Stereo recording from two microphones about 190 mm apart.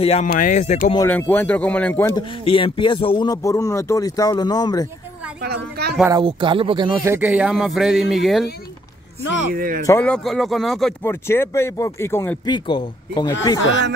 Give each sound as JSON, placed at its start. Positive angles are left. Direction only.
{"t": 0.0, "sound": "speech", "side_deg": 30}
{"t": 0.3, "sound": "speech", "side_deg": 45}
{"t": 1.0, "sound": "speech", "side_deg": 10}
{"t": 2.1, "sound": "speech", "side_deg": 25}
{"t": 5.4, "sound": "a woman's voice", "side_deg": -60}
{"t": 6.2, "sound": "speech", "side_deg": -25}
{"t": 7.1, "sound": "speech", "side_deg": -10}
{"t": 9.5, "sound": "speech", "side_deg": -50}
{"t": 9.8, "sound": "speech", "side_deg": 10}
{"t": 11.0, "sound": "speech", "side_deg": 10}